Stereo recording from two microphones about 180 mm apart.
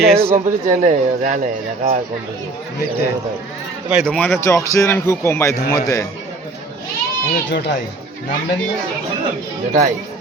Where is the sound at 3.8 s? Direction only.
5° right (ahead or behind).